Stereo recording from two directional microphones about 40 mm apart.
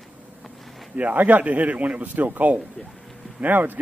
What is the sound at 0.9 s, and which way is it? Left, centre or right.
Speech, right.